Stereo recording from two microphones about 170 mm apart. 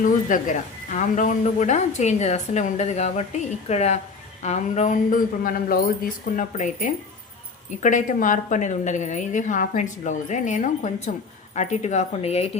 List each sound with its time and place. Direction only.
0.0 s speech: 50° left (ahead or behind)